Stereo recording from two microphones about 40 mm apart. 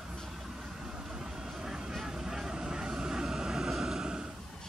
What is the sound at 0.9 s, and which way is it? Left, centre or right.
Vehicle, centre.